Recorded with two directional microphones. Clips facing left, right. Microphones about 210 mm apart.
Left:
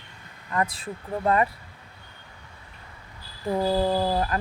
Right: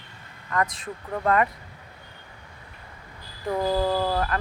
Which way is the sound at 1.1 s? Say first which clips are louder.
Even; 25° left (ahead or behind).